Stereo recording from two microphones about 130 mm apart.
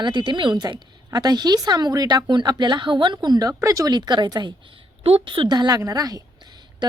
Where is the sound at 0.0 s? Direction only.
35° right (ahead or behind).